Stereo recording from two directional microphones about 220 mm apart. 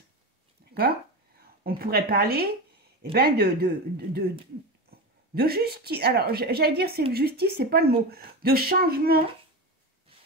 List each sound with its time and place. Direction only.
0.6 s a sound: 45° right (ahead or behind)
1.4 s a woman's voice: 45° right (ahead or behind)
5.3 s a woman's voice: 45° right (ahead or behind)